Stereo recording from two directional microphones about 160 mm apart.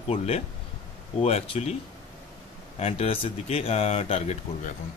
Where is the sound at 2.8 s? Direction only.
40° left (ahead or behind).